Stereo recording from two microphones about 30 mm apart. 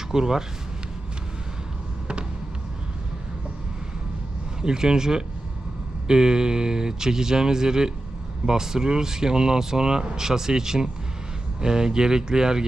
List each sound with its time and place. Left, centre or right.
0.1 s speech: centre
4.6 s speech: right